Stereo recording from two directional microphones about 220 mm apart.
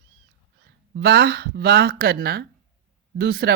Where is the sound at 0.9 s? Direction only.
45° right (ahead or behind).